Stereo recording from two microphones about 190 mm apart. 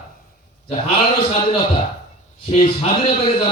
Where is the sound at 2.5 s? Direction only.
30° left (ahead or behind).